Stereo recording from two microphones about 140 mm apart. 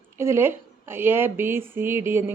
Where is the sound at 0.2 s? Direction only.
15° right (ahead or behind).